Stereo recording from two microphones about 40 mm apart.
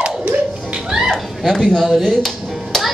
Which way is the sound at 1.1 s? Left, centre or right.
Centre.